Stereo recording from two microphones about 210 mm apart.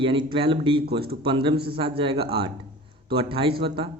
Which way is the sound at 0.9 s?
50° right (ahead or behind).